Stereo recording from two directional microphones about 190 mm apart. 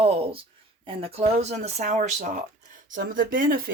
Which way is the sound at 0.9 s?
30° right (ahead or behind).